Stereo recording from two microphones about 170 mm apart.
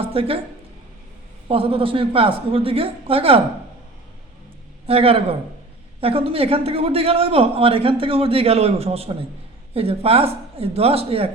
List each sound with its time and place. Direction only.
0.0 s speech: 35° right (ahead or behind)
1.5 s a man's voice: 30° right (ahead or behind)
4.9 s a man's voice: 35° right (ahead or behind)